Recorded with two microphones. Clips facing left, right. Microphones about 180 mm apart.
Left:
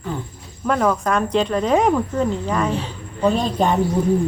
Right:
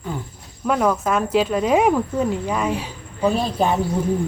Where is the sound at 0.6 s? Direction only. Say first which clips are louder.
Even; 5° right (ahead or behind).